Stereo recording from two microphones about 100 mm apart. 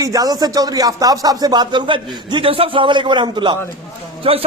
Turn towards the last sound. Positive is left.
turn(degrees=-70)  # may be behind; listen again after turning